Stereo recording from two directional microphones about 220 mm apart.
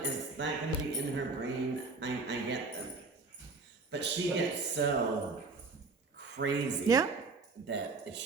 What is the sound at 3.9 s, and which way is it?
Speech, 50° right (ahead or behind).